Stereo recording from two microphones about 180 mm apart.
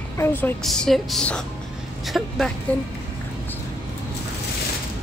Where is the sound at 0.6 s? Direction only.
Centre (ahead or behind).